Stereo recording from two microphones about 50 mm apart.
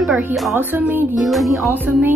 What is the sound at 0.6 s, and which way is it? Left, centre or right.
Music, right.